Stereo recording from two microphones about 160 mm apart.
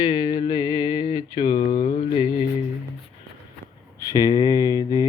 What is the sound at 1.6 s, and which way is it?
Mantra, 40° left (ahead or behind).